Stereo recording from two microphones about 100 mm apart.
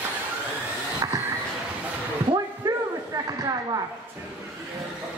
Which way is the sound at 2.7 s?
35° right (ahead or behind).